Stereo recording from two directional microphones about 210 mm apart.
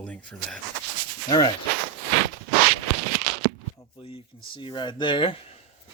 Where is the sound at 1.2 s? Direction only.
20° left (ahead or behind).